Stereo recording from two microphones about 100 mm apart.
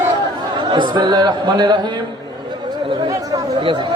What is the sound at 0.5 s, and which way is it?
A man's voice, 50° right (ahead or behind).